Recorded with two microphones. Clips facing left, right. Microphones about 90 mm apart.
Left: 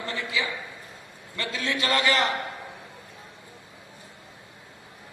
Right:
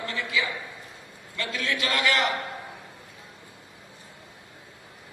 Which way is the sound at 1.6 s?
30° left (ahead or behind).